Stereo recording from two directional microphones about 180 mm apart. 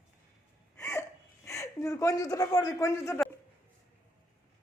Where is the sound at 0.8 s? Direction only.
15° left (ahead or behind).